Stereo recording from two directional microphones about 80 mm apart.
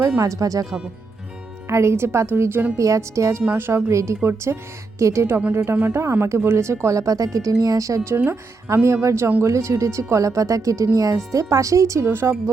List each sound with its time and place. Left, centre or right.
0.2 s speech: right
1.6 s speech: right
2.7 s speech: right
3.5 s speech: right
8.2 s speech: right